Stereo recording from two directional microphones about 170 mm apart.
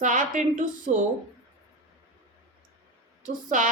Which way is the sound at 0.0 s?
50° right (ahead or behind).